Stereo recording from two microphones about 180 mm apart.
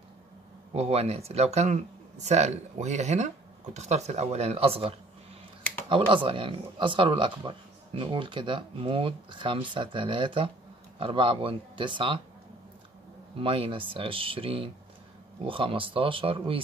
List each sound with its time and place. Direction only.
0.7 s speech: 35° right (ahead or behind)
13.4 s speech: 30° right (ahead or behind)